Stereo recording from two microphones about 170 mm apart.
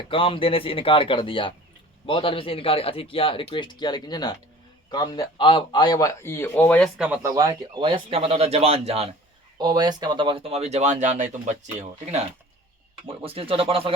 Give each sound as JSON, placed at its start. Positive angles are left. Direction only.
{"t": 0.1, "sound": "a man's voice", "side_deg": 30}
{"t": 7.0, "sound": "speech", "side_deg": -10}
{"t": 9.6, "sound": "speech", "side_deg": -25}
{"t": 13.1, "sound": "speech", "side_deg": -35}